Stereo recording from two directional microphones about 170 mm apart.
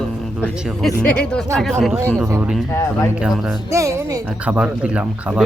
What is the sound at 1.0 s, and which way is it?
A man's voice, 5° left (ahead or behind).